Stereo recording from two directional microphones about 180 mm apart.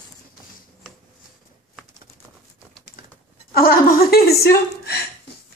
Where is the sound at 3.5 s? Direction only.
55° left (ahead or behind).